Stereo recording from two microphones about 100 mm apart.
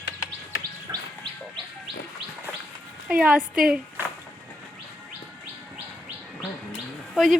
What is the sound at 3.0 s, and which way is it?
Speech, 10° right (ahead or behind).